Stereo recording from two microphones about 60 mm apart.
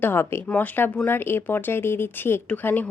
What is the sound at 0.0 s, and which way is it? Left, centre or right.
Speech, left.